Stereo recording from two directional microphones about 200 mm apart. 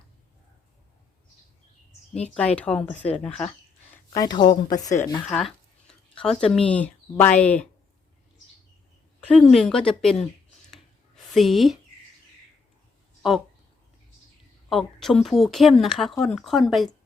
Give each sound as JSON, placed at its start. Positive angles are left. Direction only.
{"t": 2.6, "sound": "speech", "side_deg": 5}
{"t": 4.1, "sound": "speech", "side_deg": 20}
{"t": 5.3, "sound": "speech", "side_deg": 5}
{"t": 9.2, "sound": "speech", "side_deg": 5}
{"t": 10.7, "sound": "a sound", "side_deg": 0}
{"t": 14.7, "sound": "speech", "side_deg": 0}